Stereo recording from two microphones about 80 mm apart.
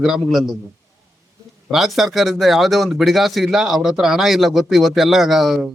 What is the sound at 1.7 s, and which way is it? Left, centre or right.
Speech, centre.